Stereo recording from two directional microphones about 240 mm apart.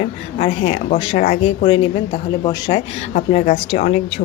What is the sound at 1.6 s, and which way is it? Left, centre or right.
A woman's voice, left.